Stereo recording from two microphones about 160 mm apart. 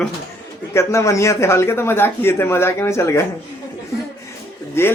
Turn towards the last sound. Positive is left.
turn(degrees=15)  # may be behind; listen again after turning